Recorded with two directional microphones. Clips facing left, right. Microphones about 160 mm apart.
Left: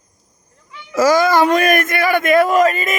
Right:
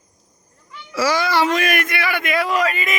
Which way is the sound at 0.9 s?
45° left (ahead or behind).